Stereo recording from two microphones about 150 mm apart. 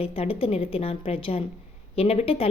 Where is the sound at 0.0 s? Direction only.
40° left (ahead or behind).